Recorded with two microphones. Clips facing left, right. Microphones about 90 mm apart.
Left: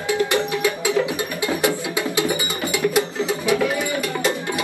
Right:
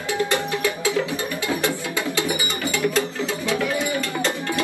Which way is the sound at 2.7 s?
15° left (ahead or behind).